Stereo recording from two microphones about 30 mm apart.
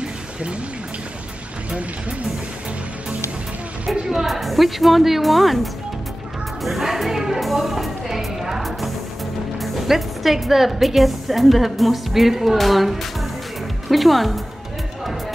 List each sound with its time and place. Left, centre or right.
0.0 s a sound: right
1.7 s speech: right
3.8 s a woman's voice: right
4.3 s speech: centre
6.8 s speech: centre
7.3 s music: centre
9.6 s speech: centre
12.5 s a woman's voice: centre